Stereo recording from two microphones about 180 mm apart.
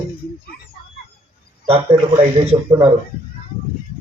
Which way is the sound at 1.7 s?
30° right (ahead or behind).